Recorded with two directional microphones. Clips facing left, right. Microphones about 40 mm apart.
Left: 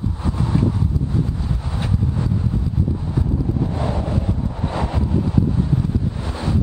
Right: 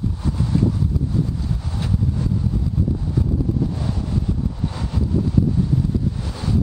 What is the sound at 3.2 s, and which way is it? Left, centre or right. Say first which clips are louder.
Vehicle: even; left.